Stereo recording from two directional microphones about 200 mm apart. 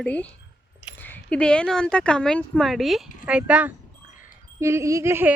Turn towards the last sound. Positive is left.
turn(degrees=-10)  # may be behind; listen again after turning